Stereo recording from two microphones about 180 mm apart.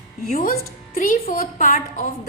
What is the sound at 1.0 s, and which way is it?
A woman's voice, 50° left (ahead or behind).